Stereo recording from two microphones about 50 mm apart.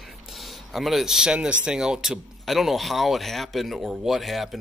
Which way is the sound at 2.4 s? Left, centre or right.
Centre.